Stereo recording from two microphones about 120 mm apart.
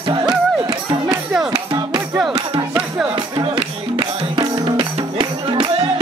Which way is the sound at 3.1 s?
45° right (ahead or behind).